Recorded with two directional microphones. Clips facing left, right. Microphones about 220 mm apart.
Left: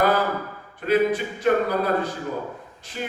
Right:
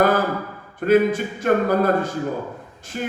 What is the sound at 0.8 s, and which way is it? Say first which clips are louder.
A man's voice: right 4 dB; 45° right (ahead or behind).